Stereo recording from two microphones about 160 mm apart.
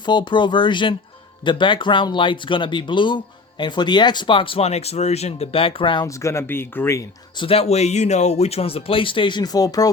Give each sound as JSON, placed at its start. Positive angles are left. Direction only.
{"t": 0.0, "sound": "speech", "side_deg": 30}
{"t": 6.1, "sound": "speech", "side_deg": 20}
{"t": 7.3, "sound": "speech", "side_deg": 35}